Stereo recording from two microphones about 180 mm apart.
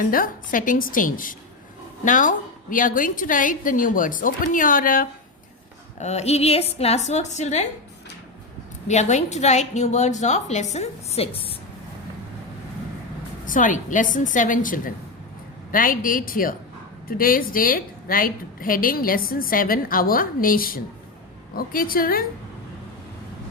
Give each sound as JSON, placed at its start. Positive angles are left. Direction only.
{"t": 0.1, "sound": "a woman's voice", "side_deg": 50}
{"t": 6.0, "sound": "a woman's voice", "side_deg": 35}
{"t": 8.9, "sound": "a woman's voice", "side_deg": 40}
{"t": 13.4, "sound": "a woman's voice", "side_deg": 45}